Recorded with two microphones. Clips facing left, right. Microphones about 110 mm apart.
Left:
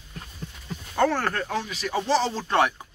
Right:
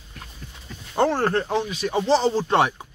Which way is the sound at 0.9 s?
25° right (ahead or behind).